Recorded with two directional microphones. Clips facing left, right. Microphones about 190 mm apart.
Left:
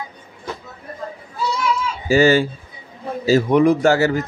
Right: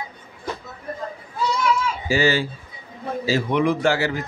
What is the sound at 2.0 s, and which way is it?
A man's voice, 45° left (ahead or behind).